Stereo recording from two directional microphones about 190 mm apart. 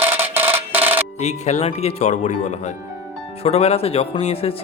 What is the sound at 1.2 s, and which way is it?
Speech, 35° left (ahead or behind).